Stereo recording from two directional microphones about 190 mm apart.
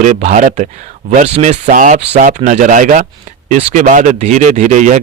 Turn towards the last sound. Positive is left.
turn(degrees=-40)  # may be behind; listen again after turning